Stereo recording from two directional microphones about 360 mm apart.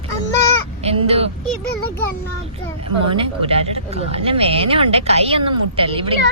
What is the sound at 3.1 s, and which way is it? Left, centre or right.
Speech, centre.